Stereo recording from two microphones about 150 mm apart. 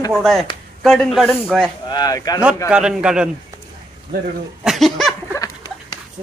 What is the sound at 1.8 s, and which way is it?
Speech, 25° left (ahead or behind).